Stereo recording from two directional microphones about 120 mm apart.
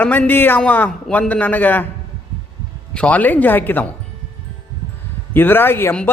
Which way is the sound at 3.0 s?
10° left (ahead or behind).